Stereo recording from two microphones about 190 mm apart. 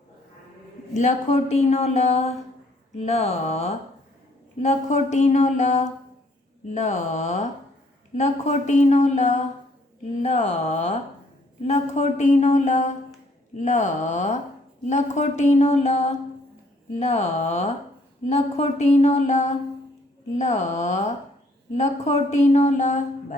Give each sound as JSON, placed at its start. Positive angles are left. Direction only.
{"t": 0.9, "sound": "speech", "side_deg": 35}